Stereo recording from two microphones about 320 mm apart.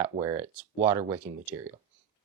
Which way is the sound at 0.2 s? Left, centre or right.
Centre.